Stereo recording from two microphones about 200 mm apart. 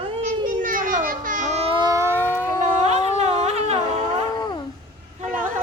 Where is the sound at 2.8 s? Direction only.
35° right (ahead or behind).